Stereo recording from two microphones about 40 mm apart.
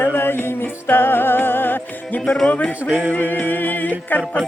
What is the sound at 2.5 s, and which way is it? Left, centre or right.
Music, left.